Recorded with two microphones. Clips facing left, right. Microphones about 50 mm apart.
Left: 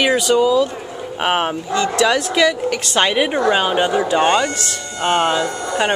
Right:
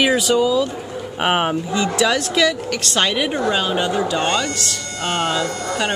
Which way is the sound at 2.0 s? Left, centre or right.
Centre.